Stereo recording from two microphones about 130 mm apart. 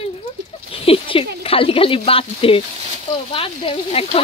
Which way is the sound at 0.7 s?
45° left (ahead or behind).